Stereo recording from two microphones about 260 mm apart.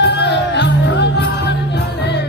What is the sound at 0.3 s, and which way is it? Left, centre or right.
Music, left.